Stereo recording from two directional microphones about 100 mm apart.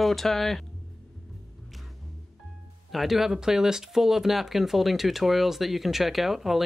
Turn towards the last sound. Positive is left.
turn(degrees=0)  # may be behind; listen again after turning